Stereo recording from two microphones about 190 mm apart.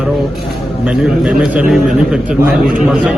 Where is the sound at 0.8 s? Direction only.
5° right (ahead or behind).